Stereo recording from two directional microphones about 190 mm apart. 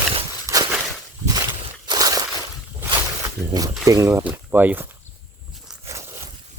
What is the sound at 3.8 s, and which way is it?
Speech, 15° right (ahead or behind).